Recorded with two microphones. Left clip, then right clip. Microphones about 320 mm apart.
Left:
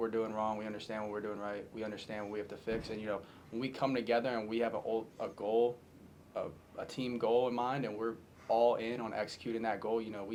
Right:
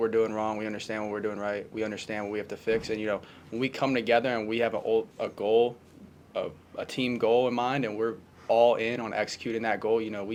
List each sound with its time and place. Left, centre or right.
0.0 s speech: right